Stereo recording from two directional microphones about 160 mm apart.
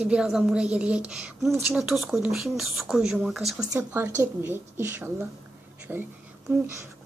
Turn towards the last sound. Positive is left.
turn(degrees=-15)  # may be behind; listen again after turning